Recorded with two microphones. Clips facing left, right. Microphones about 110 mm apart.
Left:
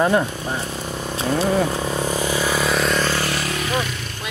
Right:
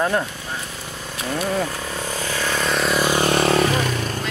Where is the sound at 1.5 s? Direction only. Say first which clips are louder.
Left 4 dB; 15° left (ahead or behind); by 3.0 s centre (ahead or behind).